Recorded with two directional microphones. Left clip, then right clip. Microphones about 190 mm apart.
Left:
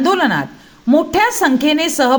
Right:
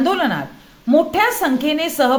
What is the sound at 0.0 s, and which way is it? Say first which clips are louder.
A woman's voice: left 4 dB; 30° left (ahead or behind).